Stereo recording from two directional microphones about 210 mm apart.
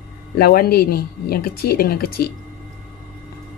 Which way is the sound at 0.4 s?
45° left (ahead or behind).